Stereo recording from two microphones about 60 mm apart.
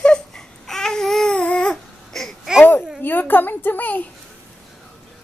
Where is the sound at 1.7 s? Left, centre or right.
Centre.